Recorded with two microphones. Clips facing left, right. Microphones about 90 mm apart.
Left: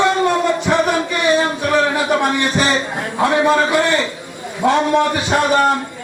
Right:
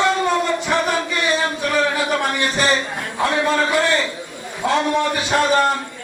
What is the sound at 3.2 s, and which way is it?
Speech, 10° left (ahead or behind).